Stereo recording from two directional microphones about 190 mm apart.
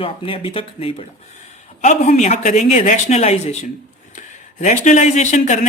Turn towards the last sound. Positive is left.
turn(degrees=40)  # may be behind; listen again after turning